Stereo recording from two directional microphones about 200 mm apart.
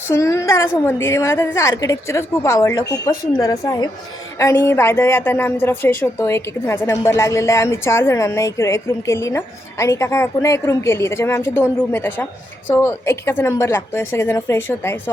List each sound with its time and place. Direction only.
0.1 s a woman's voice: 15° left (ahead or behind)